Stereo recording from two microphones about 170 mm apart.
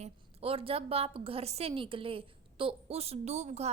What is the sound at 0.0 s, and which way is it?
A woman's voice, 35° right (ahead or behind).